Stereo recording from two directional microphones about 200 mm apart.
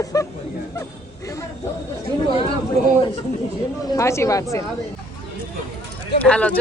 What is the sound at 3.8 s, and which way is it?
Speech, 15° left (ahead or behind).